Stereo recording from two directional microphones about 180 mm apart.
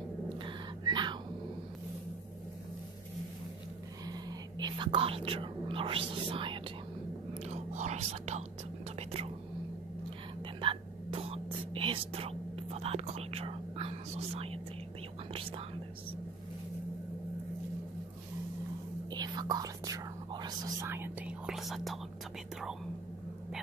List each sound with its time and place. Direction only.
0.4 s a sound: 25° right (ahead or behind)
4.0 s whispering: 20° right (ahead or behind)
7.4 s speech: 40° right (ahead or behind)
10.6 s whispering: 30° right (ahead or behind)
19.0 s whispering: 25° right (ahead or behind); by 22.0 s centre (ahead or behind)